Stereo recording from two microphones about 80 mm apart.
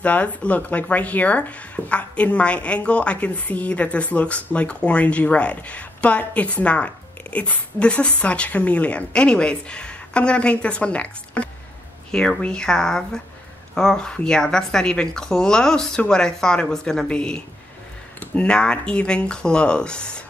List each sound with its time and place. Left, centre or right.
0.0 s speech: centre